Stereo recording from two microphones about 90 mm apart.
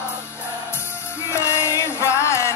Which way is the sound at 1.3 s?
30° left (ahead or behind).